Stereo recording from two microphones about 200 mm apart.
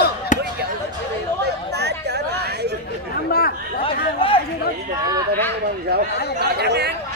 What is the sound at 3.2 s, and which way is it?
Chatter, 50° left (ahead or behind).